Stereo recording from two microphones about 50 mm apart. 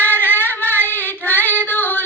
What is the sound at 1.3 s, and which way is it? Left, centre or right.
Female singing, left.